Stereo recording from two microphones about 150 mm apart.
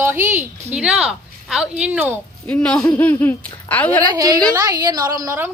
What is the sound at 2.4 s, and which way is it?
Speech, 10° left (ahead or behind).